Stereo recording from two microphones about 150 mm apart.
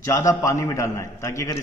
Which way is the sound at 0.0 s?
20° left (ahead or behind).